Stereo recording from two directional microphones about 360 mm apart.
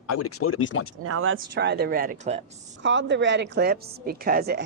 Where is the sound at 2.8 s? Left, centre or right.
Right.